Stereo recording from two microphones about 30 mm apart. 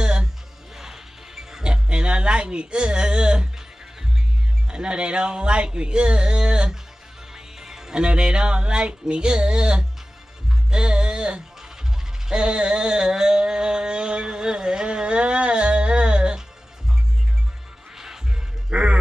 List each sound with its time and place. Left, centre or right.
0.0 s music: right
0.7 s music: centre
1.6 s a sound: right
4.6 s speech: right
7.3 s music: centre
8.0 s speech: right
10.7 s music: right
12.3 s a sound: right
17.9 s music: centre
18.7 s music: right